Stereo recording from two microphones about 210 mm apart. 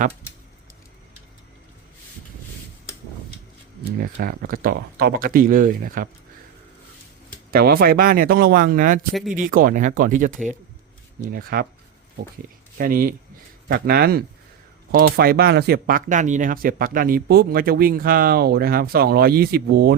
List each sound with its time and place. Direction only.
3.9 s speech: 45° right (ahead or behind)
7.5 s speech: 45° right (ahead or behind)
12.7 s speech: 45° right (ahead or behind)